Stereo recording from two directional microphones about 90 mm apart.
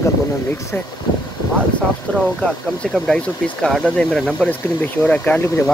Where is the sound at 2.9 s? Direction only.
5° left (ahead or behind).